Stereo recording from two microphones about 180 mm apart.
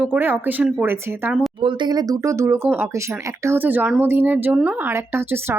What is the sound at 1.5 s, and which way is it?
Speech, 25° right (ahead or behind).